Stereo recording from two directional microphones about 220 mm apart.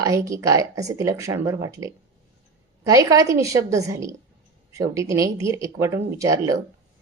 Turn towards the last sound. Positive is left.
turn(degrees=-15)  # may be behind; listen again after turning